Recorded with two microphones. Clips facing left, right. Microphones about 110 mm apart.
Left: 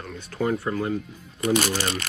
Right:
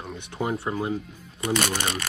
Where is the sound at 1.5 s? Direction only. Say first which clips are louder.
Left 1 dB; 55° right (ahead or behind).